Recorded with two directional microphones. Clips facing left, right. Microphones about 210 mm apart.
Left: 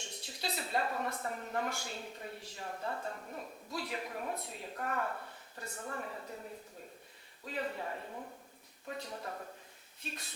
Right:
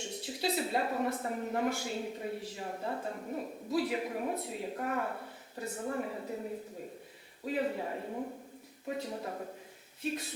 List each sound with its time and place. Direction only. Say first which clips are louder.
0.0 s a woman's voice: right 8 dB; 5° right (ahead or behind); by 8.3 s 20° right (ahead or behind)
8.9 s speech: right 5 dB; 10° right (ahead or behind)
10.0 s speech: right 11 dB; 5° right (ahead or behind)